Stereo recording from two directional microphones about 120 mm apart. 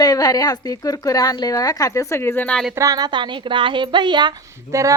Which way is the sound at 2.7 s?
30° right (ahead or behind).